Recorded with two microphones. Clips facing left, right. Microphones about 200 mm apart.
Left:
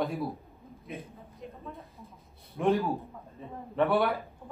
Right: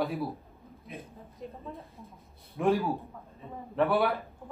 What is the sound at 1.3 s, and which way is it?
A woman's voice, centre (ahead or behind).